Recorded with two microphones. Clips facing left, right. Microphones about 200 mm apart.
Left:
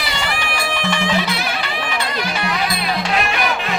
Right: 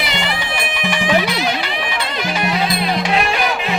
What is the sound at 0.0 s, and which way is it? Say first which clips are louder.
Music: right 2 dB; 20° right (ahead or behind).